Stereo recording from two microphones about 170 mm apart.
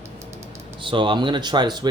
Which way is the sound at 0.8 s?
30° right (ahead or behind).